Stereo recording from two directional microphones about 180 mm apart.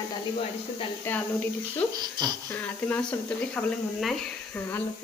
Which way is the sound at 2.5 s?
10° left (ahead or behind).